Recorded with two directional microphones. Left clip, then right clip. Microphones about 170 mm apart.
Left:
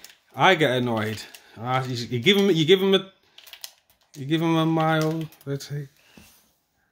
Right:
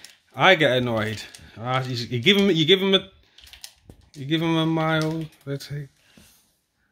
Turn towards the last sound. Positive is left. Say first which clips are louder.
# left 1 dB
turn(degrees=10)  # may be behind; listen again after turning